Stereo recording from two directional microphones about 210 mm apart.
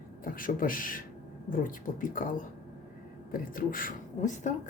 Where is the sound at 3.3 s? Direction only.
40° left (ahead or behind).